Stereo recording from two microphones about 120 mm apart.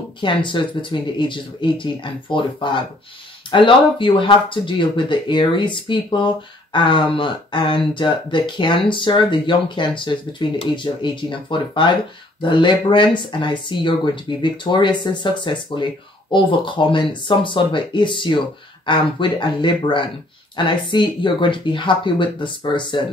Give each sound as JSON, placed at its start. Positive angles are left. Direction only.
{"t": 0.2, "sound": "speech", "side_deg": 40}